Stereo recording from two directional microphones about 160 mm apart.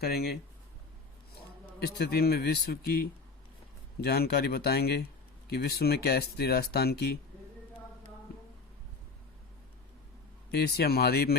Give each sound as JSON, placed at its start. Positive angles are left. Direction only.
{"t": 0.0, "sound": "speech", "side_deg": 75}
{"t": 1.4, "sound": "a man's voice", "side_deg": 80}
{"t": 10.5, "sound": "speech", "side_deg": 85}